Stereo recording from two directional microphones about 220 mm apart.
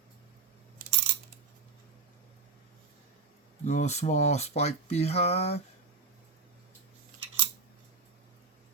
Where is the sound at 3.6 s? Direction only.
35° left (ahead or behind).